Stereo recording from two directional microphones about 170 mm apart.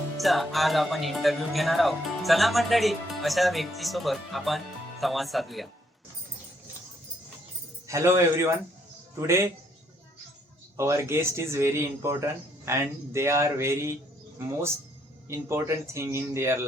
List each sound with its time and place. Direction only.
0.2 s speech: centre (ahead or behind)
7.9 s speech: 15° right (ahead or behind)
10.8 s speech: 15° right (ahead or behind)
15.3 s speech: 15° right (ahead or behind)